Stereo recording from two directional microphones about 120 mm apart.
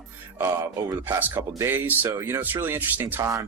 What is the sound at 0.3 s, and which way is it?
Speech, 25° right (ahead or behind).